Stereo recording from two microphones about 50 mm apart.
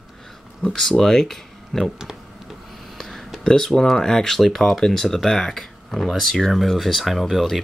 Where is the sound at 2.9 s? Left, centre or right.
Centre.